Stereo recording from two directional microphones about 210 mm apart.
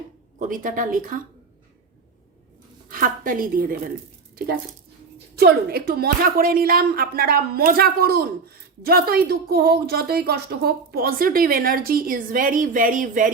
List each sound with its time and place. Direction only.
0.3 s a woman's voice: 40° right (ahead or behind)
2.9 s a woman's voice: 40° right (ahead or behind)
5.4 s a woman's voice: 45° right (ahead or behind)